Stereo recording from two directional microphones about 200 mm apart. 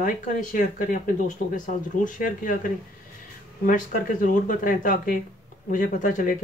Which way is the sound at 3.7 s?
40° left (ahead or behind).